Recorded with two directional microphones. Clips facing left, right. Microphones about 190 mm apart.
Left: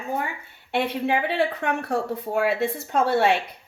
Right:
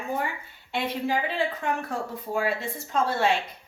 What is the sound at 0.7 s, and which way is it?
Speech, 65° left (ahead or behind).